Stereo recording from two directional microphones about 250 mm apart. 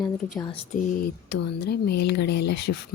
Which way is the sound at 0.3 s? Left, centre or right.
Left.